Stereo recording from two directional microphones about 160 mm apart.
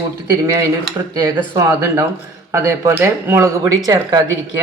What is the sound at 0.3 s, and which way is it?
Speech, 20° right (ahead or behind).